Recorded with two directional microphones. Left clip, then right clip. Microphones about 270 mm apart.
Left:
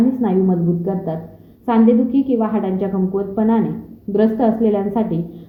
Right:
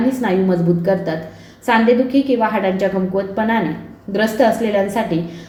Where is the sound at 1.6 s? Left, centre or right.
Left.